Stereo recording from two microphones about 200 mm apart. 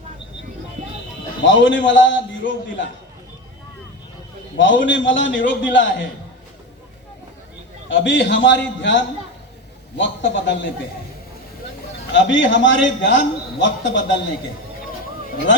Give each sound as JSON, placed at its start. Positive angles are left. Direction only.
{"t": 1.5, "sound": "a man's voice", "side_deg": 65}
{"t": 4.5, "sound": "a man's voice", "side_deg": 65}
{"t": 7.9, "sound": "a man's voice", "side_deg": 65}
{"t": 12.1, "sound": "a man's voice", "side_deg": 65}